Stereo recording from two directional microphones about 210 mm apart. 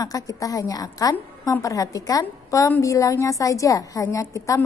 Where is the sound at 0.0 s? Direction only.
15° left (ahead or behind).